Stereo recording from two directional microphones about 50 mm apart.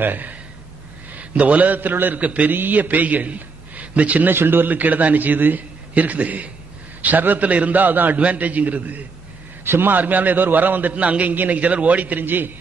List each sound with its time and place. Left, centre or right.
0.0 s a man's voice: right
4.3 s a man's voice: right